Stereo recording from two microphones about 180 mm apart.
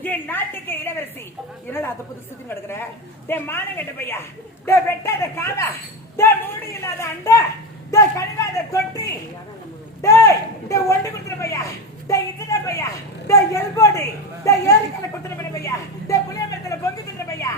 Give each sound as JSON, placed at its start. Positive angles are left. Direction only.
{"t": 0.0, "sound": "speech", "side_deg": 10}
{"t": 3.2, "sound": "a man's voice", "side_deg": 10}
{"t": 16.6, "sound": "a sound", "side_deg": 15}